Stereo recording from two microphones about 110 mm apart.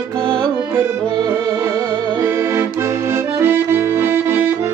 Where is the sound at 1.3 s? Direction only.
25° right (ahead or behind).